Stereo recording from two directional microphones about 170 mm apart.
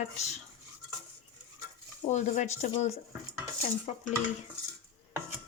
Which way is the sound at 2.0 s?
45° left (ahead or behind).